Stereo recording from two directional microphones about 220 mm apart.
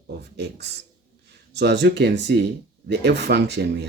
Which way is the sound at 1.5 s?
50° right (ahead or behind).